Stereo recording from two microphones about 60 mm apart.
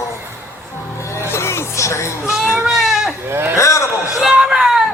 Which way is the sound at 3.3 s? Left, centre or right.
Right.